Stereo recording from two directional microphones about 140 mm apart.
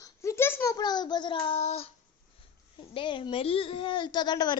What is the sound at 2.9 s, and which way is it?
Speech, 35° left (ahead or behind).